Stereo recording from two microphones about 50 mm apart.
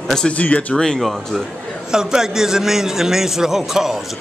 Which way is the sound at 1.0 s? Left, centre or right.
Centre.